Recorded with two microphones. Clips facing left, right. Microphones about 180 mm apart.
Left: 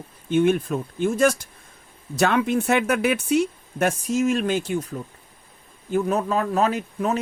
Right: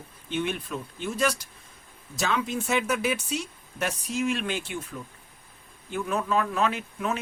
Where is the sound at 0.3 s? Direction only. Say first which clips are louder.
Left 11 dB; 45° left (ahead or behind).